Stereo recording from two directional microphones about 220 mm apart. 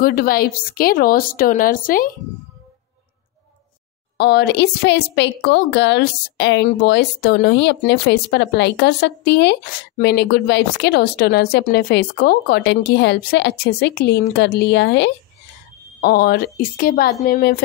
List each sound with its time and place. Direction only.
0.0 s a woman's voice: 40° left (ahead or behind)
4.2 s a woman's voice: 50° left (ahead or behind)